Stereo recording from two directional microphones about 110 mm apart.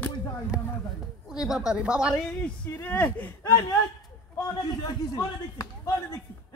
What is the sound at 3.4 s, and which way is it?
A man's voice, 30° left (ahead or behind).